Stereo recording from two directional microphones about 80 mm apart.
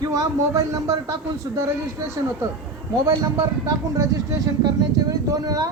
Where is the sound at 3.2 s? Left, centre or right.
Right.